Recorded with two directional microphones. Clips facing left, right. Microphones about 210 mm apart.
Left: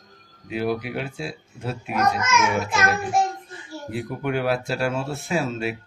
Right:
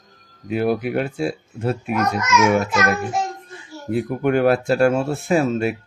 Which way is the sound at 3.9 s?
50° right (ahead or behind).